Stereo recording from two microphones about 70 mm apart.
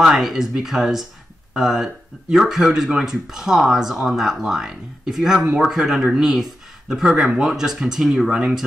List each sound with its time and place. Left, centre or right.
0.0 s speech: centre